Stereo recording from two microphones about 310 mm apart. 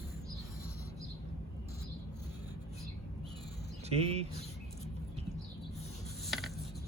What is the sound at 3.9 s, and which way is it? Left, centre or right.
Speech, centre.